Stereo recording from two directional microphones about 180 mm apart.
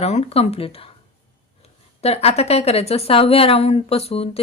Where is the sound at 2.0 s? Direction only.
35° left (ahead or behind).